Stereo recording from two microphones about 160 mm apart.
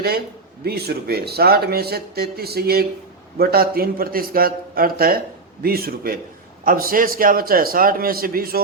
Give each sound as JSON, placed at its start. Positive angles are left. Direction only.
{"t": 0.6, "sound": "a man's voice", "side_deg": -75}